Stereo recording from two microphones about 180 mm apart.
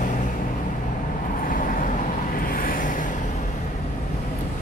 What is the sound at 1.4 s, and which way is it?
Vehicle, 50° left (ahead or behind).